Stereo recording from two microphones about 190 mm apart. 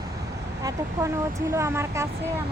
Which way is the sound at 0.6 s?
15° right (ahead or behind).